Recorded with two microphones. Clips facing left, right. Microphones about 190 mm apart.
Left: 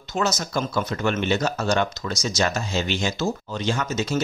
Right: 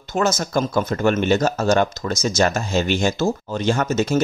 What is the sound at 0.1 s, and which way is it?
Speech, 50° right (ahead or behind).